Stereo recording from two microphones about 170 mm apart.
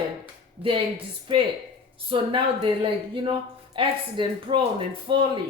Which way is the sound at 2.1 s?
30° right (ahead or behind).